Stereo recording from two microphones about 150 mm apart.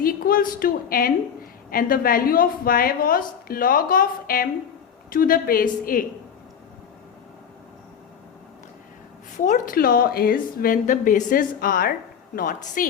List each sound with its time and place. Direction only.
0.0 s a woman's voice: 75° left (ahead or behind)
9.4 s a woman's voice: 65° left (ahead or behind)
12.4 s a woman's voice: 65° left (ahead or behind)